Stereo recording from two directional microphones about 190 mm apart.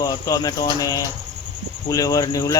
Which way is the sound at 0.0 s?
20° left (ahead or behind).